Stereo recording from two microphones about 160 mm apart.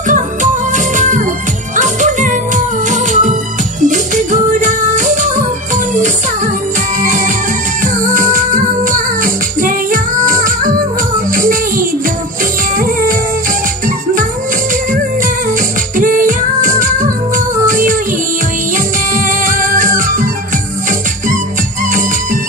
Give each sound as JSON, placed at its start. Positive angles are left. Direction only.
{"t": 0.1, "sound": "music", "side_deg": -50}
{"t": 7.0, "sound": "music", "side_deg": -55}
{"t": 12.7, "sound": "music", "side_deg": -60}
{"t": 16.0, "sound": "music", "side_deg": -60}
{"t": 19.1, "sound": "music", "side_deg": -55}